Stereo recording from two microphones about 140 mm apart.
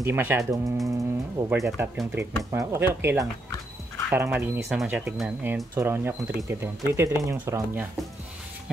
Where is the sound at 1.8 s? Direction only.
15° right (ahead or behind).